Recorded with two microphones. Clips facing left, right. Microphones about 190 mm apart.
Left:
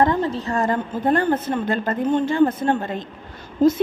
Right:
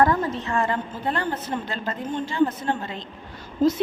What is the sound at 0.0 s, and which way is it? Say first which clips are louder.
A woman's voice: left 2 dB; 25° left (ahead or behind).